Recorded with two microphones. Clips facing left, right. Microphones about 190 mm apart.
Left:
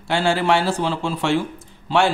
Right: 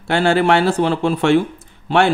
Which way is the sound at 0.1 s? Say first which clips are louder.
Right 4 dB; 60° right (ahead or behind).